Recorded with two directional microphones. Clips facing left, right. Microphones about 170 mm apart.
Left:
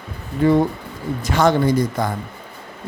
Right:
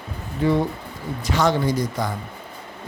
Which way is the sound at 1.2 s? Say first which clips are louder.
Left 4 dB; 50° left (ahead or behind).